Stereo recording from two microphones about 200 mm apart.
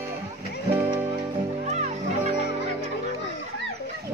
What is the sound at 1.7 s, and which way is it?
Music, 35° right (ahead or behind).